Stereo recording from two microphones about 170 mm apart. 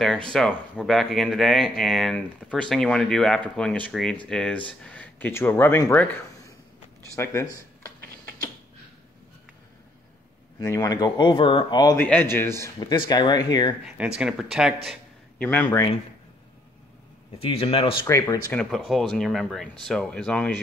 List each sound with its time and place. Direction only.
0.3 s a man's voice: centre (ahead or behind)
10.6 s speech: 20° left (ahead or behind)
12.0 s a man's voice: 10° left (ahead or behind)
12.7 s speech: 30° left (ahead or behind)
13.8 s speech: 5° right (ahead or behind)
14.9 s a sound: 10° left (ahead or behind)
17.4 s speech: 35° left (ahead or behind)
18.0 s speech: 15° left (ahead or behind)